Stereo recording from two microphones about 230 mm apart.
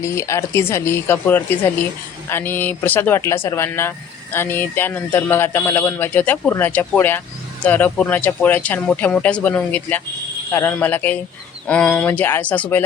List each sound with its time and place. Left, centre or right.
0.0 s speech: centre